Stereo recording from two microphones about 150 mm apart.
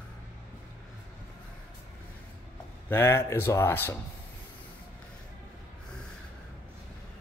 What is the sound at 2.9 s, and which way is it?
Speech, 15° left (ahead or behind).